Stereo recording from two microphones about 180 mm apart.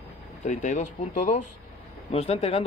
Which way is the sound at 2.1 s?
35° left (ahead or behind).